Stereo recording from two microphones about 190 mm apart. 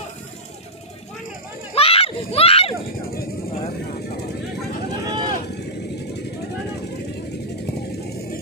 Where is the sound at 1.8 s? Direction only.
30° left (ahead or behind).